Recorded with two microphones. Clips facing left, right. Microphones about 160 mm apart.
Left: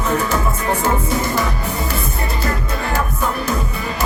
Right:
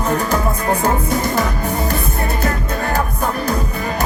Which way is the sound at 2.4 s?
45° right (ahead or behind).